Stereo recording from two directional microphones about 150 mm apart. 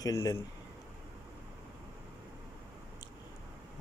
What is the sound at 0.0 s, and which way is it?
Speech, 20° left (ahead or behind).